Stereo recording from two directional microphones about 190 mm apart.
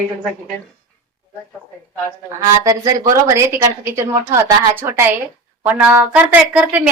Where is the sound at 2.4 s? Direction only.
20° right (ahead or behind).